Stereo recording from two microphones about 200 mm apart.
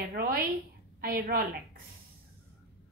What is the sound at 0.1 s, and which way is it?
A woman's voice, 50° right (ahead or behind).